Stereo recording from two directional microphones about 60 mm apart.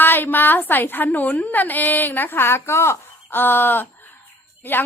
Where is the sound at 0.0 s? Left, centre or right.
Left.